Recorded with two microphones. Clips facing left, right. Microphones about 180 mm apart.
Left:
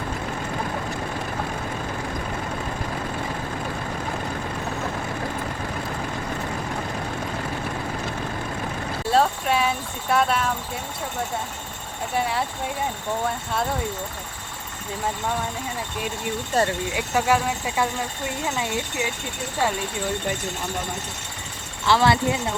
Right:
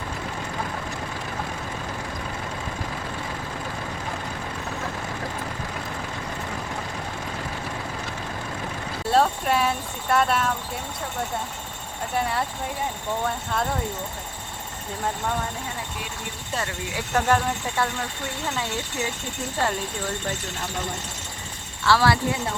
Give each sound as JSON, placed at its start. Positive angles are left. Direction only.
{"t": 9.0, "sound": "speech", "side_deg": 0}
{"t": 12.1, "sound": "speech", "side_deg": 0}
{"t": 16.6, "sound": "speech", "side_deg": 40}
{"t": 17.2, "sound": "speech", "side_deg": 5}
{"t": 21.8, "sound": "speech", "side_deg": 20}